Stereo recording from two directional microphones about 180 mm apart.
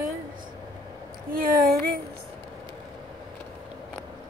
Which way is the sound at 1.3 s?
55° right (ahead or behind).